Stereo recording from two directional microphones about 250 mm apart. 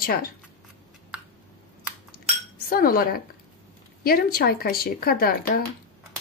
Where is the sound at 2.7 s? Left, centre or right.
Left.